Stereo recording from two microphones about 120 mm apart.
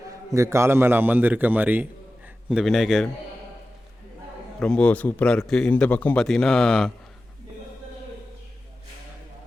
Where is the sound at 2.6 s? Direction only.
5° right (ahead or behind).